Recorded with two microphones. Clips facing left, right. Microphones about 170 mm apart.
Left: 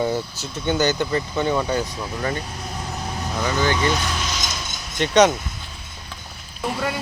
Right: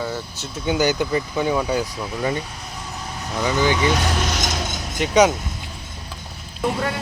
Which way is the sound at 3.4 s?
15° right (ahead or behind).